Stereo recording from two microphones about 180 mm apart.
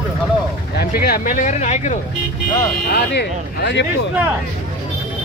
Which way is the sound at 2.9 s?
75° left (ahead or behind).